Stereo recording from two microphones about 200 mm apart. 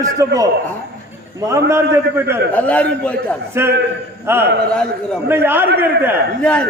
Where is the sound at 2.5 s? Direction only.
5° left (ahead or behind).